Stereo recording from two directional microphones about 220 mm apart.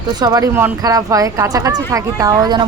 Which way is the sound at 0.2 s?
15° right (ahead or behind).